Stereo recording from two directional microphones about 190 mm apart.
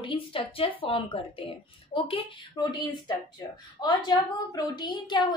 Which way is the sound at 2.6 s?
25° left (ahead or behind).